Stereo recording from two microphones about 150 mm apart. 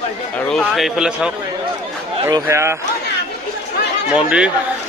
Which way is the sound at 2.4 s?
20° right (ahead or behind).